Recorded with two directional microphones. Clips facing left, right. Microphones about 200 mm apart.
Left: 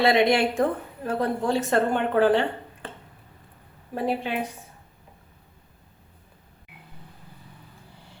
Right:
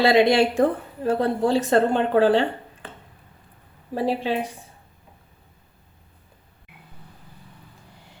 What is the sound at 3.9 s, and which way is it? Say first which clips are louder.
Speech: right 3 dB; 30° right (ahead or behind).